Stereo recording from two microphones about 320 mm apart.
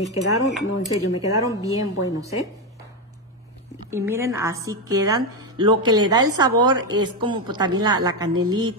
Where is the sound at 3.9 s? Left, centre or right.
Centre.